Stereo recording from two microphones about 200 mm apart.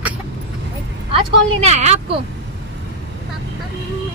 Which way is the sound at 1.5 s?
30° right (ahead or behind).